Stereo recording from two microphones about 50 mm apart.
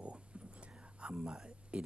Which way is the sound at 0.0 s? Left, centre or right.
Right.